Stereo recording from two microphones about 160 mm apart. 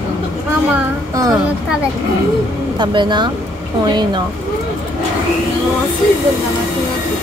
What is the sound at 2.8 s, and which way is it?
Speech, 30° right (ahead or behind).